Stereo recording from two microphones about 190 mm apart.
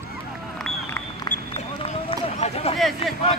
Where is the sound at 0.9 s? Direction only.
10° left (ahead or behind).